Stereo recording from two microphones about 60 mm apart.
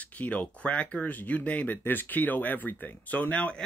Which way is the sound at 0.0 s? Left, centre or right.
Left.